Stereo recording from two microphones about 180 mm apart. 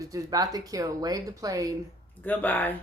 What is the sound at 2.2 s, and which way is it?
Speech, 10° left (ahead or behind).